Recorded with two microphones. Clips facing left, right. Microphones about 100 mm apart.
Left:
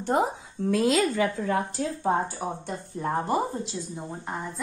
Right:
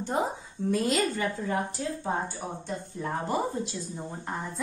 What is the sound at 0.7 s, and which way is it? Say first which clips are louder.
Speech: left 4 dB; 90° left.